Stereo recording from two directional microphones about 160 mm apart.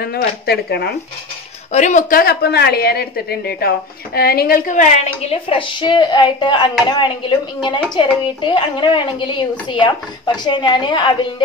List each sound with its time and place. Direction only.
0.0 s speech: 85° left
1.7 s a woman's voice: 45° left (ahead or behind)
5.2 s speech: 35° left (ahead or behind)